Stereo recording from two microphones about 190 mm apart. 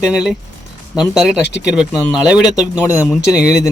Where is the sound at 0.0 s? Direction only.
5° right (ahead or behind).